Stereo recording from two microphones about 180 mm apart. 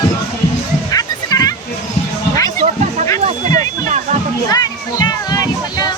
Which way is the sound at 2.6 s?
40° right (ahead or behind).